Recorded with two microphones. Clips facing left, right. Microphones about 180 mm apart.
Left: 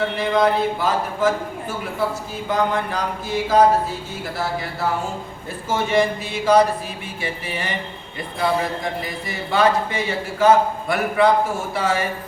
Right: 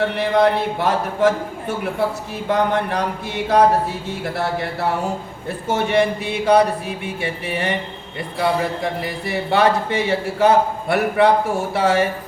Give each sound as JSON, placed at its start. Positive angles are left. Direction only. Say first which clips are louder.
{"t": 0.2, "sound": "speech", "louder": "right 1 dB", "side_deg": -65}
{"t": 8.8, "sound": "speech", "louder": "right 3 dB", "side_deg": -65}